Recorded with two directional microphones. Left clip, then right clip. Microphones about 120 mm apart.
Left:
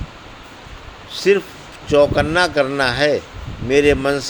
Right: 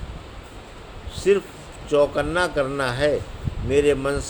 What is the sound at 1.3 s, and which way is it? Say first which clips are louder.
Speech: left 4 dB; 40° left (ahead or behind).